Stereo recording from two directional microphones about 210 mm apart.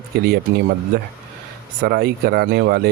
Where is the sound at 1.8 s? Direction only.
45° right (ahead or behind).